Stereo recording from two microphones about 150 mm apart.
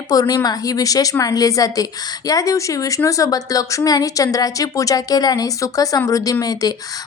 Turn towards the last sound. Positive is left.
turn(degrees=25)  # may be behind; listen again after turning